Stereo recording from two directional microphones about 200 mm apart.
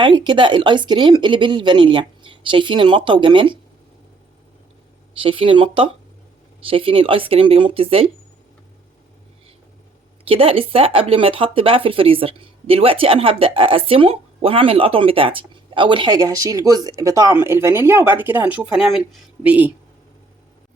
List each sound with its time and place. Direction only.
0.0 s speech: 25° right (ahead or behind)
5.1 s speech: 25° right (ahead or behind)
10.2 s speech: 30° right (ahead or behind); by 19.7 s 10° right (ahead or behind)